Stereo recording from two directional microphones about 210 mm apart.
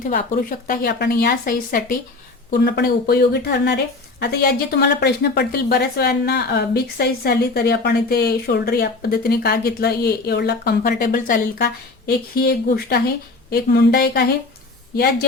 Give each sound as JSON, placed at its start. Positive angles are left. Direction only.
{"t": 0.0, "sound": "a woman's voice", "side_deg": 40}